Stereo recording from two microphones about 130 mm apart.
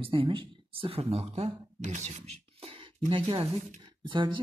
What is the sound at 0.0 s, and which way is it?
Speech, 45° right (ahead or behind).